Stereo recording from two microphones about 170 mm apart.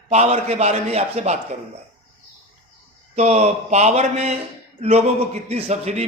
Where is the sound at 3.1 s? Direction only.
40° right (ahead or behind).